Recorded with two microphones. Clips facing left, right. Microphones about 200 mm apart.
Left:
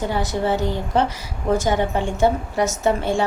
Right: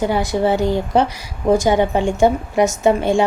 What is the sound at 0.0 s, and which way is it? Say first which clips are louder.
A woman's voice: right 5 dB; 10° right (ahead or behind).